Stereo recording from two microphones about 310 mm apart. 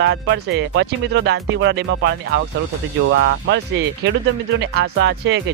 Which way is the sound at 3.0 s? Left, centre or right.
Right.